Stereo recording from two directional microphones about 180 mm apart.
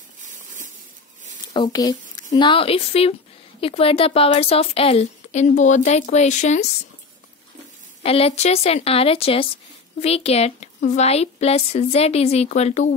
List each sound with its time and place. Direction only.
1.5 s a woman's voice: 25° left (ahead or behind); by 6.7 s 40° left (ahead or behind)
8.0 s a woman's voice: 35° left (ahead or behind)